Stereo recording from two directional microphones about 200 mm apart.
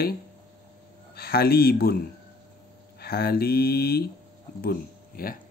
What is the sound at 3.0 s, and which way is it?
Speech, 50° left (ahead or behind).